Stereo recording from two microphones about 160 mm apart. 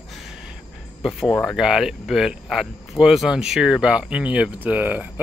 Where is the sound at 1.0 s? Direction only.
Centre (ahead or behind).